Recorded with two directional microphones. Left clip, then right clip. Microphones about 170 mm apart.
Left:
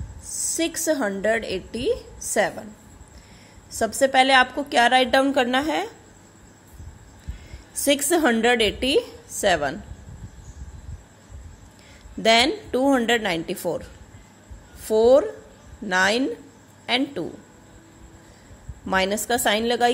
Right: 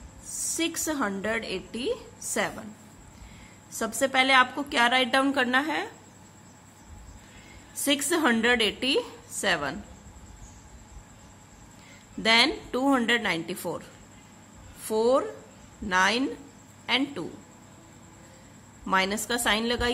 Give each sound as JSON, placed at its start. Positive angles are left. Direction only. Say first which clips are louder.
{"t": 0.6, "sound": "a woman's voice", "louder": "left 5 dB", "side_deg": 20}
{"t": 3.7, "sound": "a woman's voice", "louder": "left 6 dB", "side_deg": 20}
{"t": 7.8, "sound": "a woman's voice", "louder": "left 5 dB", "side_deg": 20}
{"t": 12.2, "sound": "a woman's voice", "louder": "left 4 dB", "side_deg": 20}
{"t": 18.9, "sound": "a woman's voice", "louder": "left 4 dB", "side_deg": 20}